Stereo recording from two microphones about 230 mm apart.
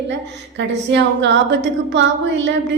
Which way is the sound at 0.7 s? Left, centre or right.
Right.